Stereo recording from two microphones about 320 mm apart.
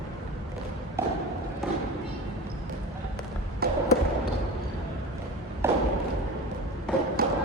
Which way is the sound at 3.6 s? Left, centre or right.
Right.